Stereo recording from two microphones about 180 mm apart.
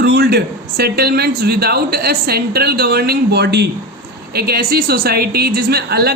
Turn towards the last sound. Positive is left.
turn(degrees=-65)  # may be behind; listen again after turning